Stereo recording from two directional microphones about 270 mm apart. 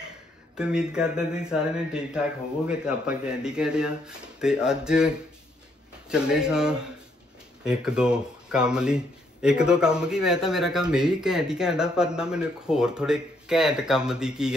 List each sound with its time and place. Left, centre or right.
0.6 s speech: centre